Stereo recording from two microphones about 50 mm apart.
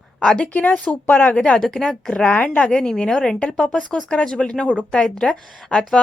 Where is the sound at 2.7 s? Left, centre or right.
Centre.